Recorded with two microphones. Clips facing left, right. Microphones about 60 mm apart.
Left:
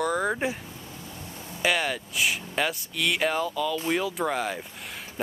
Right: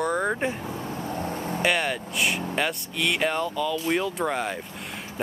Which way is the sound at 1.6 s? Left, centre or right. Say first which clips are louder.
Even; centre.